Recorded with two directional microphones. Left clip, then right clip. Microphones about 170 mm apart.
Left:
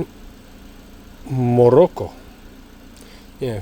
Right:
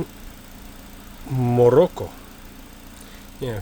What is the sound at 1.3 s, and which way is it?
Speech, 5° left (ahead or behind).